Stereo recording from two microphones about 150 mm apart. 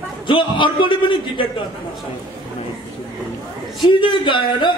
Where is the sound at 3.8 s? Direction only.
35° left (ahead or behind).